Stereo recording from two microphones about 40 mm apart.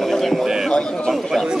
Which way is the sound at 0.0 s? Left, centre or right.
Centre.